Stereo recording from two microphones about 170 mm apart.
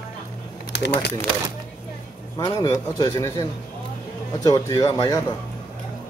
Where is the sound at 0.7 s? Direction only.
80° left.